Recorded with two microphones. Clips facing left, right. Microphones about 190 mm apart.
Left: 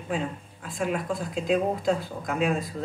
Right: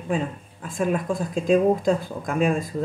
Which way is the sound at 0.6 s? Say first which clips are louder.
Right 4 dB; 50° right (ahead or behind).